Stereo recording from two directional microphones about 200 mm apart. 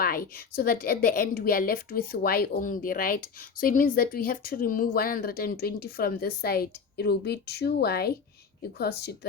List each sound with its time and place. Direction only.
0.0 s a woman's voice: 45° left (ahead or behind)